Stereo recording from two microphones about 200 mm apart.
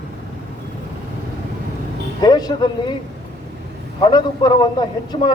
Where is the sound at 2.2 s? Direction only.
20° left (ahead or behind).